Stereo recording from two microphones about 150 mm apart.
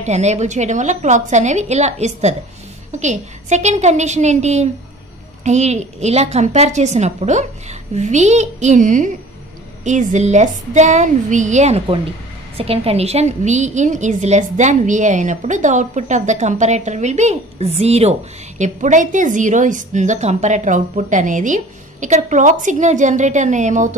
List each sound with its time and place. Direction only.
0.0 s a woman's voice: 50° right (ahead or behind)
18.6 s a woman's voice: 55° right (ahead or behind)